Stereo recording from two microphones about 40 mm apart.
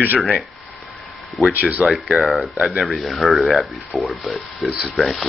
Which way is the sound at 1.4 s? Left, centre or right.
Centre.